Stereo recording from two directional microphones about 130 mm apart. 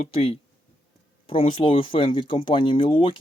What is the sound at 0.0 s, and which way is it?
Speech, 50° left (ahead or behind).